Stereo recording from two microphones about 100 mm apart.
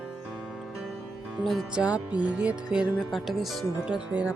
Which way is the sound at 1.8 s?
10° right (ahead or behind).